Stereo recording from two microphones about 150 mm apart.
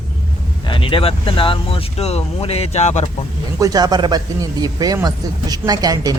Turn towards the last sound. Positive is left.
turn(degrees=-25)  # may be behind; listen again after turning